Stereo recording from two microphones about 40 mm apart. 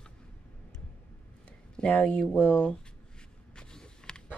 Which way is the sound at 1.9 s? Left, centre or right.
Left.